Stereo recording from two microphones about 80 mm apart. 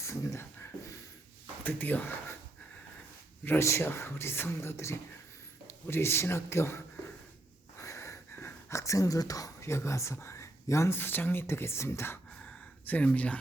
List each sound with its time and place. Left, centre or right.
0.0 s beatboxing: left
1.6 s speech: left
3.6 s speech: left
12.5 s a sound: centre
13.1 s speech: centre